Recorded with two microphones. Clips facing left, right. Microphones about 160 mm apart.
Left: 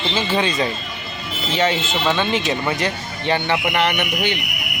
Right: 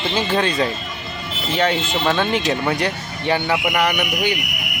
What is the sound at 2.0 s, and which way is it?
Speech, centre (ahead or behind).